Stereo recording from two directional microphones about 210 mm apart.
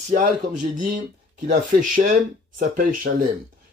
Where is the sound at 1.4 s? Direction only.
40° right (ahead or behind).